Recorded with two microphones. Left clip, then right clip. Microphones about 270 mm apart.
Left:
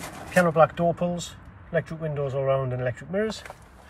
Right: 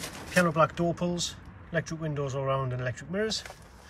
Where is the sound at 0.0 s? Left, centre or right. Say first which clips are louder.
Left 4 dB; centre.